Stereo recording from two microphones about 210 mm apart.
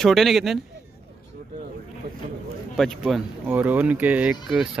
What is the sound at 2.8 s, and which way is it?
Speech, centre (ahead or behind).